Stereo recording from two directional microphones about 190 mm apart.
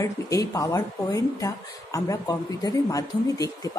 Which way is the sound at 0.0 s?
15° left (ahead or behind).